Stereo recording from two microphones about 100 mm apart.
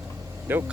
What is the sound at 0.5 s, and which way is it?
Speech, 20° right (ahead or behind).